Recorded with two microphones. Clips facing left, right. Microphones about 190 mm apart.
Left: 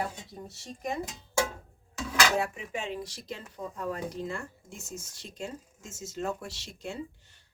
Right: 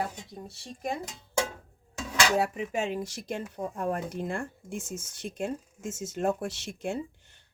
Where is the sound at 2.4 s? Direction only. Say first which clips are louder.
Right 5 dB; 45° right (ahead or behind).